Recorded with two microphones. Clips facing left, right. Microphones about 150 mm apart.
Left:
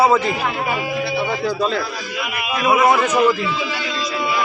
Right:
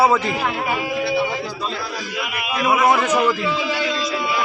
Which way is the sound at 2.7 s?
10° left (ahead or behind).